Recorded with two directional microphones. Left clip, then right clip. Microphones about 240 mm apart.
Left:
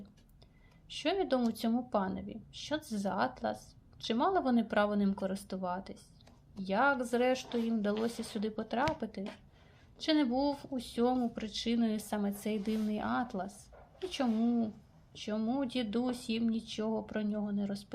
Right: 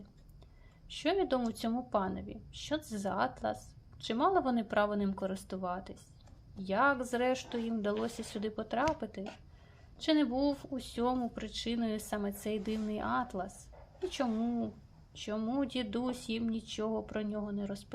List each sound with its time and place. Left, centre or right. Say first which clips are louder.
0.9 s speech: even; centre